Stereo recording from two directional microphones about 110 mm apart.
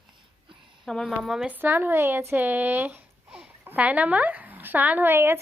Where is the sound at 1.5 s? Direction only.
20° right (ahead or behind).